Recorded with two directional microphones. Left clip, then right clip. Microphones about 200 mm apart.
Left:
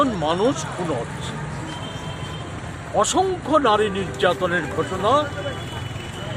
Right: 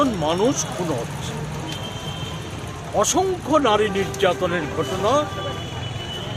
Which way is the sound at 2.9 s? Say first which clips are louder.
Even; 5° left (ahead or behind).